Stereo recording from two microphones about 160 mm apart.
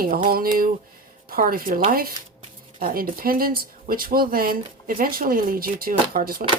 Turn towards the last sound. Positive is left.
turn(degrees=-70)  # may be behind; listen again after turning